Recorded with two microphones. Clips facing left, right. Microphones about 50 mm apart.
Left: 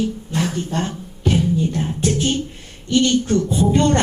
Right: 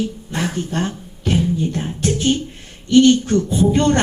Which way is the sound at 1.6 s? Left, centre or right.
Right.